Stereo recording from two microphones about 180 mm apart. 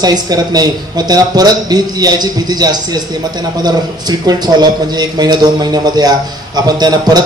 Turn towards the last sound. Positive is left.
turn(degrees=-20)  # may be behind; listen again after turning